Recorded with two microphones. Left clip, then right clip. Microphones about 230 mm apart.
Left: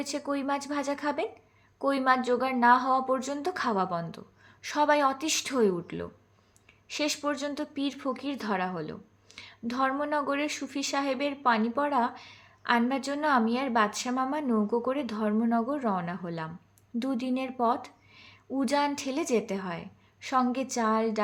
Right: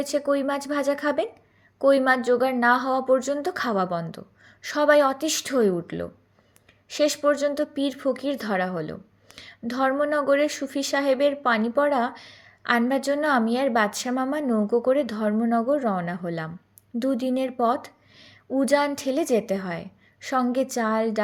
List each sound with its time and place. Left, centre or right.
0.0 s a woman's voice: centre